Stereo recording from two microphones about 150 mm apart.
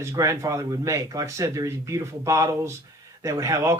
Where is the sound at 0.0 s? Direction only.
20° right (ahead or behind).